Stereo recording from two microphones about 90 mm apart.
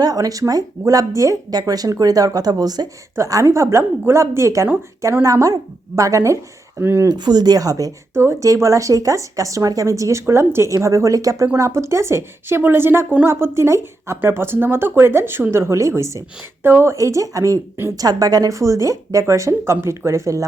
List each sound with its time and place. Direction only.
0.0 s speech: 45° right (ahead or behind)
3.2 s speech: 35° right (ahead or behind)
7.1 s speech: 50° right (ahead or behind)
8.1 s speech: 30° right (ahead or behind)